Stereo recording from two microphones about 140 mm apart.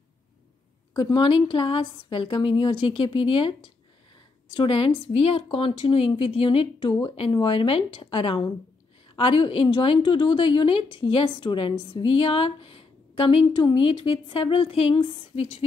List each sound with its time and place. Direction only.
0.9 s a woman's voice: 35° left (ahead or behind)